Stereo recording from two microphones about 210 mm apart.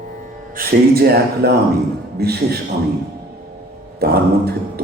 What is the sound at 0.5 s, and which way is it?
A man's voice, 45° right (ahead or behind).